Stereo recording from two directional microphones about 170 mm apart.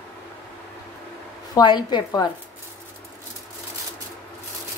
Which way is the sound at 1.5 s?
25° left (ahead or behind).